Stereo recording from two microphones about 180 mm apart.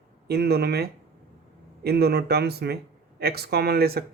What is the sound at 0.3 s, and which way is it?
Speech, 60° right (ahead or behind).